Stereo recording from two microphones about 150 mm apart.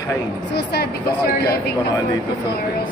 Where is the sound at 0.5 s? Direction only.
90° left.